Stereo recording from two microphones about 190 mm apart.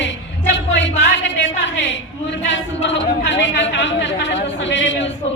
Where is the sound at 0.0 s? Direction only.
75° left (ahead or behind).